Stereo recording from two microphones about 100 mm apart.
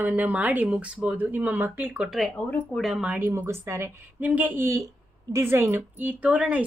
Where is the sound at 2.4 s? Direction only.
15° left (ahead or behind).